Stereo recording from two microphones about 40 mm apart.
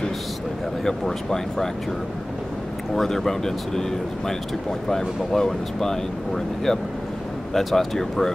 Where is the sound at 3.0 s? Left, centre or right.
Centre.